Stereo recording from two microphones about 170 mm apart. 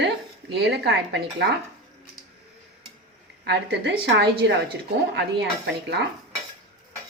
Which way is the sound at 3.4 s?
85° right.